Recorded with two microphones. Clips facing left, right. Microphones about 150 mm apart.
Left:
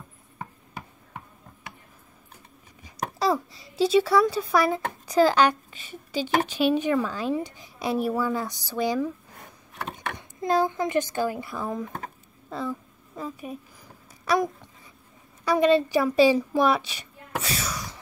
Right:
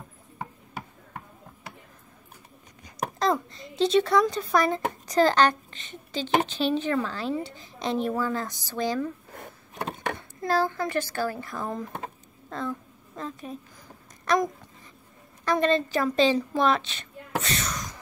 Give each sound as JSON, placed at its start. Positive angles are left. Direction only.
{"t": 2.8, "sound": "a child's voice", "side_deg": 5}
{"t": 10.1, "sound": "a woman's voice", "side_deg": 20}